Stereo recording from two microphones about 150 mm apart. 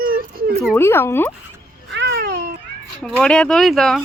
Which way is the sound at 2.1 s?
90° right.